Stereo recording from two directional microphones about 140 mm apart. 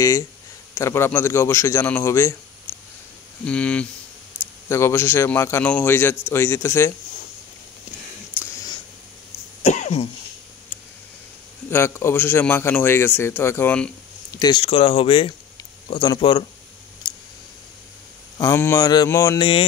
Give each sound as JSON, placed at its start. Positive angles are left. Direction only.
{"t": 0.7, "sound": "speech", "side_deg": 20}
{"t": 2.7, "sound": "a sound", "side_deg": 20}
{"t": 3.4, "sound": "a man's voice", "side_deg": 10}
{"t": 4.6, "sound": "a man's voice", "side_deg": 20}
{"t": 9.6, "sound": "cough", "side_deg": 55}
{"t": 11.7, "sound": "a man's voice", "side_deg": 15}
{"t": 14.3, "sound": "a sound", "side_deg": 30}
{"t": 14.6, "sound": "speech", "side_deg": 40}
{"t": 17.0, "sound": "a sound", "side_deg": 30}
{"t": 18.4, "sound": "speech", "side_deg": 20}